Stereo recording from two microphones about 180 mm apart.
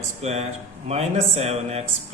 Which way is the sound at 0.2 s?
35° right (ahead or behind).